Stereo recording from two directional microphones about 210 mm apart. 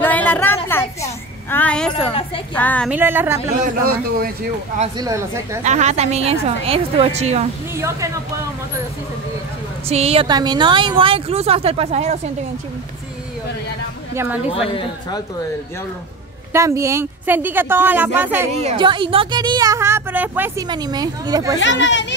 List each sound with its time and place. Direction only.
0.0 s a sound: 10° left (ahead or behind)
1.5 s a woman's voice: 5° left (ahead or behind)
2.9 s a woman's voice: 10° right (ahead or behind)
3.6 s speech: 45° right (ahead or behind)
4.9 s a woman's voice: 15° right (ahead or behind)
5.6 s a woman's voice: 35° right (ahead or behind)
7.7 s a woman's voice: 15° right (ahead or behind)
9.8 s a woman's voice: 30° right (ahead or behind)
14.1 s a woman's voice: 10° right (ahead or behind)
14.5 s speech: 25° left (ahead or behind)
16.5 s a woman's voice: 15° right (ahead or behind)
18.5 s a woman's voice: 30° right (ahead or behind)
21.5 s speech: 60° left (ahead or behind)